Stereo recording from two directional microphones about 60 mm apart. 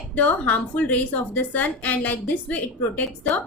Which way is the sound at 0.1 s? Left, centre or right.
Left.